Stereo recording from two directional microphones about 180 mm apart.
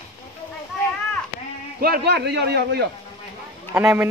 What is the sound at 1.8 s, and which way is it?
A man's voice, 60° right (ahead or behind).